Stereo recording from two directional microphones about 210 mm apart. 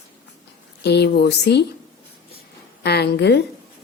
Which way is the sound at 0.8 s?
50° left (ahead or behind).